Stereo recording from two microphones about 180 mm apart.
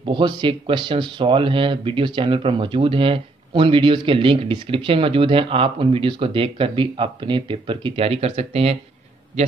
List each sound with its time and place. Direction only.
0.0 s speech: 25° right (ahead or behind)